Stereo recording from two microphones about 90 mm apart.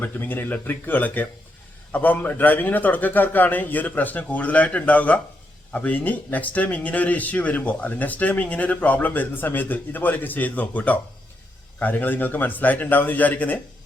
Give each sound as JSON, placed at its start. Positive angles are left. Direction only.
{"t": 0.0, "sound": "a man's voice", "side_deg": 20}